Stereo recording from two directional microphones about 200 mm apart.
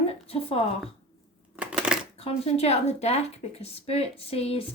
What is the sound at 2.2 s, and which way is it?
Speech, 30° left (ahead or behind).